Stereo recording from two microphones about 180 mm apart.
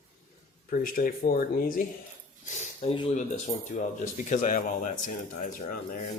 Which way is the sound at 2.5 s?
40° left (ahead or behind).